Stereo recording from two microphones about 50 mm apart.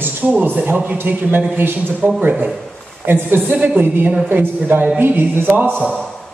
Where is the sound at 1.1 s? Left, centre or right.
Right.